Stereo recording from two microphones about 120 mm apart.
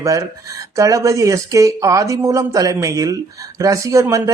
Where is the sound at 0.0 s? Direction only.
25° right (ahead or behind).